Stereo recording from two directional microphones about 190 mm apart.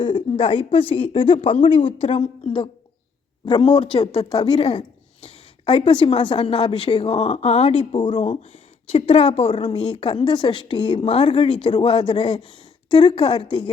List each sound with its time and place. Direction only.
0.0 s a woman's voice: 25° left (ahead or behind)
3.9 s a woman's voice: 35° left (ahead or behind)